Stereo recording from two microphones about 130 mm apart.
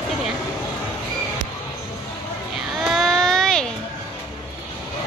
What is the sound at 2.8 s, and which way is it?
Baby cry, centre (ahead or behind).